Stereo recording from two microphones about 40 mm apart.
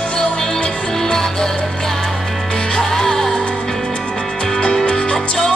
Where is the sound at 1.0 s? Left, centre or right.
Centre.